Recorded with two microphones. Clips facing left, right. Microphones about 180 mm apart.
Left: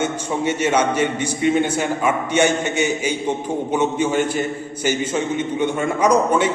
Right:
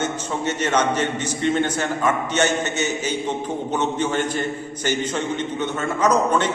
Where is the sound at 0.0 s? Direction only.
10° left (ahead or behind).